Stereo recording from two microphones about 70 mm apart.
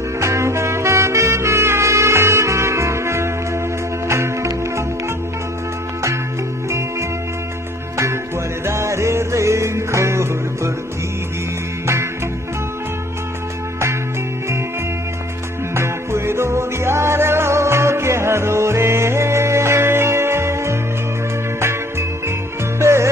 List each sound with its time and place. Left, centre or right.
0.2 s music: right
8.6 s music: right
11.8 s music: right
15.7 s music: right
22.8 s music: right